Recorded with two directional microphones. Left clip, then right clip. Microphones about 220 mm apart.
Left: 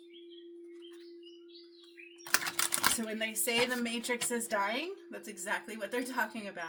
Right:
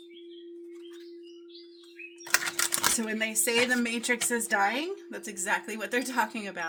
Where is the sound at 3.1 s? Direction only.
45° right (ahead or behind).